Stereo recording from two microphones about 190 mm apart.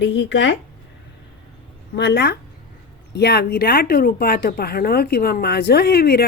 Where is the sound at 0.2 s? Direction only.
70° left (ahead or behind).